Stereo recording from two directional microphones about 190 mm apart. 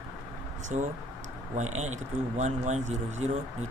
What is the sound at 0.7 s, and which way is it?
Speech, 40° right (ahead or behind).